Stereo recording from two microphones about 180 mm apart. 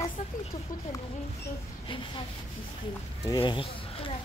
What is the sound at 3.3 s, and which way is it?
Speech, 25° left (ahead or behind).